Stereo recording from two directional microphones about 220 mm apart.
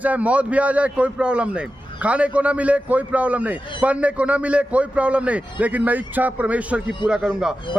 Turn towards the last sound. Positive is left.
turn(degrees=-5)  # may be behind; listen again after turning